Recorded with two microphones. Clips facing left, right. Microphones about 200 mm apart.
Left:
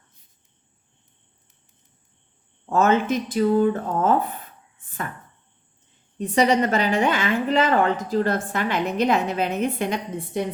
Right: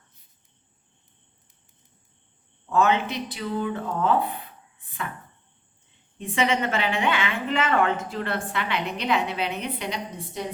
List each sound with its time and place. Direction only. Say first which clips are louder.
2.6 s speech: left 3 dB; 45° left (ahead or behind)
6.1 s a woman's voice: left 5 dB; 40° left (ahead or behind)